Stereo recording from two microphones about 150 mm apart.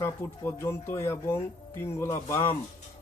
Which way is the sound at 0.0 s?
15° left (ahead or behind).